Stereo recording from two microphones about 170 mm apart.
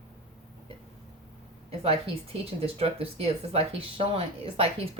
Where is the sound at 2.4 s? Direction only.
35° right (ahead or behind).